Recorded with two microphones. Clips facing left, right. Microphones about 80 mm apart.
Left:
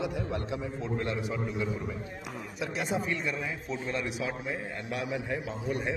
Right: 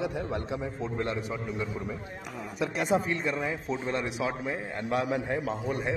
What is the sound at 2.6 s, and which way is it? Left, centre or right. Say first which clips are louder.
Speech: right 6 dB; right.